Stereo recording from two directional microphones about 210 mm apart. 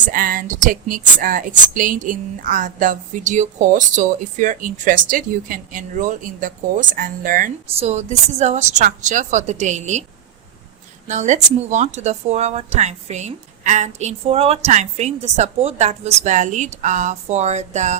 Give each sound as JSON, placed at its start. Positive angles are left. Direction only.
{"t": 0.0, "sound": "speech", "side_deg": -40}
{"t": 11.1, "sound": "speech", "side_deg": -35}